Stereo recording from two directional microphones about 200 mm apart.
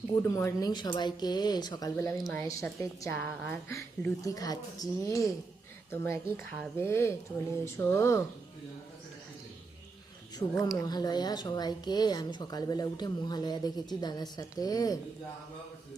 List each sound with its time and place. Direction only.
0.2 s a woman's voice: 15° left (ahead or behind)
10.3 s a woman's voice: 20° left (ahead or behind)